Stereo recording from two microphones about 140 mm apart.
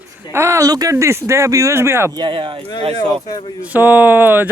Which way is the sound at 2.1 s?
35° right (ahead or behind).